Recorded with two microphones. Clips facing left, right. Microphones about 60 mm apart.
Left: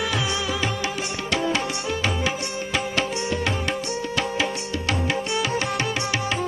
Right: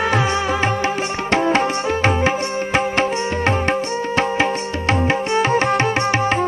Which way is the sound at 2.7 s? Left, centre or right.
Right.